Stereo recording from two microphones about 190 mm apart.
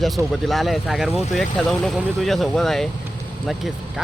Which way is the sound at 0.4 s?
Centre (ahead or behind).